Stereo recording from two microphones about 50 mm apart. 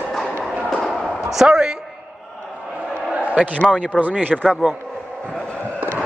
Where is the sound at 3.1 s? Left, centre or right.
Right.